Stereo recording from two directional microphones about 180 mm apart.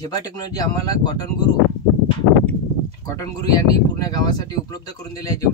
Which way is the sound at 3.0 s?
20° left (ahead or behind).